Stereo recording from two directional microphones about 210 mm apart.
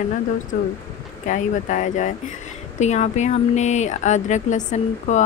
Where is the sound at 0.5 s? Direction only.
35° left (ahead or behind).